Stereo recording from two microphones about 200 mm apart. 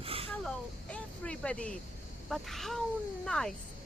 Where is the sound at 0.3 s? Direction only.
5° left (ahead or behind).